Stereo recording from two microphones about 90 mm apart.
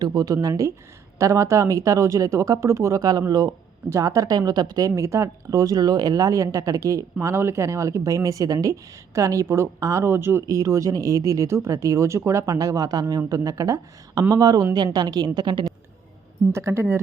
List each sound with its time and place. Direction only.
0.0 s speech: 45° right (ahead or behind); by 10.5 s 25° right (ahead or behind)
10.5 s speech: 40° right (ahead or behind)
16.5 s speech: 30° right (ahead or behind)